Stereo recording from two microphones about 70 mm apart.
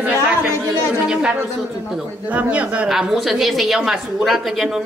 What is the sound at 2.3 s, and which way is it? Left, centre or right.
Speech, centre.